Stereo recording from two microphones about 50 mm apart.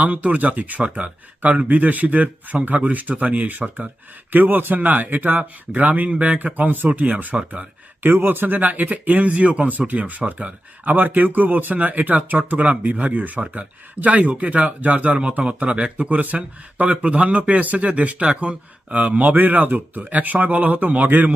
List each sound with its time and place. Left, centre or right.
0.0 s speech: right
8.0 s speech: right